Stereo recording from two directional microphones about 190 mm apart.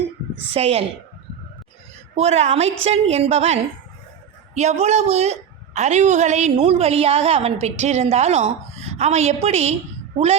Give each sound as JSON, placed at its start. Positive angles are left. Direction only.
{"t": 0.5, "sound": "a woman's voice", "side_deg": -30}
{"t": 2.1, "sound": "a woman's voice", "side_deg": -35}